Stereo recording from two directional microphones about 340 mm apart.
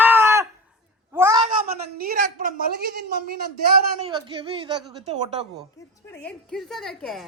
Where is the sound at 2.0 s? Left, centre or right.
Right.